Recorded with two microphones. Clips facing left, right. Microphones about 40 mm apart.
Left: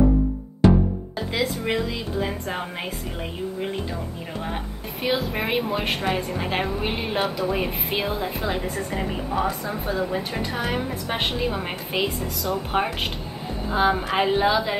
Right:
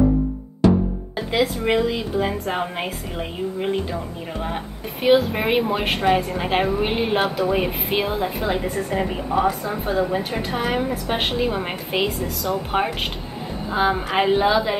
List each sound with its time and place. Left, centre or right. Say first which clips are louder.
1.4 s a woman's voice: right 5 dB; centre
5.0 s a woman's voice: right 7 dB; centre